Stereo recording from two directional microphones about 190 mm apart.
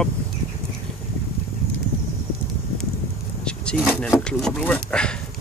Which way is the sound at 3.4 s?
Centre (ahead or behind).